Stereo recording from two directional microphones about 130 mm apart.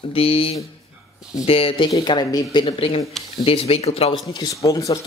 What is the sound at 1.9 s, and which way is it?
Speech, 35° left (ahead or behind).